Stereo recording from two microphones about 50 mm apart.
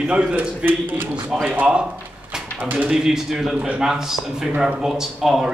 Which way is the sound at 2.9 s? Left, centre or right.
Centre.